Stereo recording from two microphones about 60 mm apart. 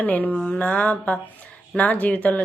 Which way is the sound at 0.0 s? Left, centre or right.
Left.